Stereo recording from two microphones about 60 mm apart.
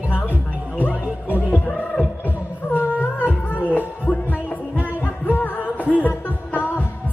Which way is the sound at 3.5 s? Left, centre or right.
Left.